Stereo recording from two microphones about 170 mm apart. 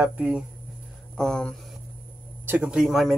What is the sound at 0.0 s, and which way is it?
Speech, 5° right (ahead or behind).